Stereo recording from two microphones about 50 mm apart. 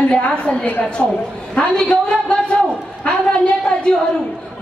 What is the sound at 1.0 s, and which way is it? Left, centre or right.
Speech, centre.